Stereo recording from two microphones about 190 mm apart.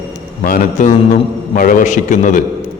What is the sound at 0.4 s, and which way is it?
A man's voice, 45° left (ahead or behind).